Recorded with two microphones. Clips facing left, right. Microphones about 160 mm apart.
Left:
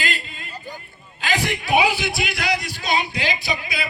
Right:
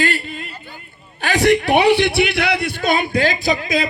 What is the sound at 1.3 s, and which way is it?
A man's voice, 70° right (ahead or behind).